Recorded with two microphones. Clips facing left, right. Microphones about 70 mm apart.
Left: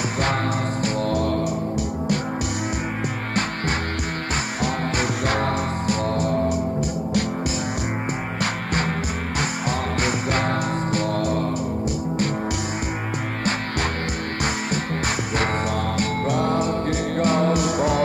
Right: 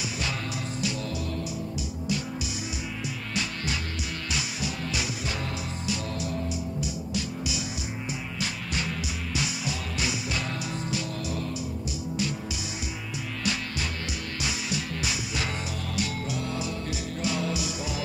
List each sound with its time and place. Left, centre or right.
0.8 s music: left
4.6 s music: left
9.4 s music: left
14.4 s music: left